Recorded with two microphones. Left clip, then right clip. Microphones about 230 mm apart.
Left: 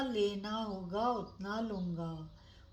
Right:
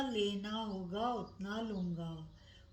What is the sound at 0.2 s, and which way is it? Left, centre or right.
Speech, left.